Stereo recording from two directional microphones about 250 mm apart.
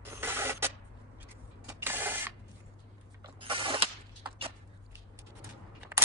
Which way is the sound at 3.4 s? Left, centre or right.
Right.